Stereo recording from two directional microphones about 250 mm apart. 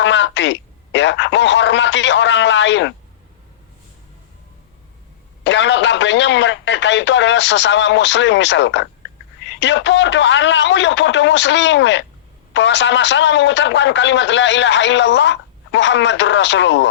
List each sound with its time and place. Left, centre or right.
0.0 s speech: left
5.5 s a man's voice: left